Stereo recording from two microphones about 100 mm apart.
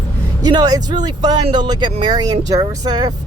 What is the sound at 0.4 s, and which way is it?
Speech, 40° right (ahead or behind).